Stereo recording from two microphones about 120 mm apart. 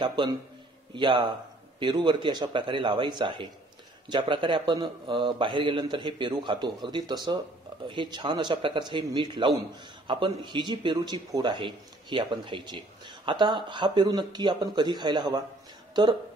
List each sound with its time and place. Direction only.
0.0 s speech: 40° right (ahead or behind)